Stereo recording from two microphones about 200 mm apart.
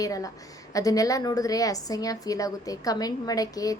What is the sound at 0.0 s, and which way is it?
A woman's voice, 15° left (ahead or behind).